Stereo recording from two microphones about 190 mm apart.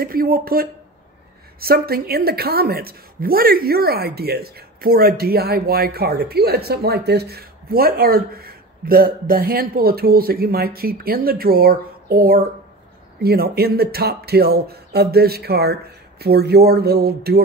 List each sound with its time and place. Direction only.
0.0 s a woman's voice: 50° right (ahead or behind)